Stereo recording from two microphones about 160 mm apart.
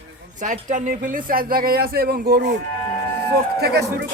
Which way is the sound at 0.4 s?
55° right (ahead or behind).